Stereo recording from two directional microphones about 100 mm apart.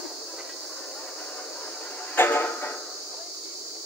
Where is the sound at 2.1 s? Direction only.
20° left (ahead or behind).